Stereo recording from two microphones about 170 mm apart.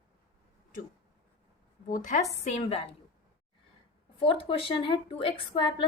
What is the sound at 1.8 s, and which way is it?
Speech, 50° left (ahead or behind).